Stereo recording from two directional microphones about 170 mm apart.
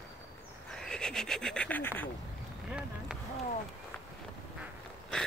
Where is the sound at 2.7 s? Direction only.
5° right (ahead or behind).